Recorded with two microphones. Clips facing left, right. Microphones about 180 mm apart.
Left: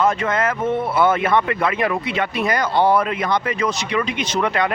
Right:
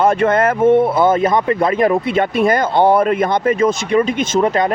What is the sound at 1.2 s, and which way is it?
A man's voice, 40° right (ahead or behind).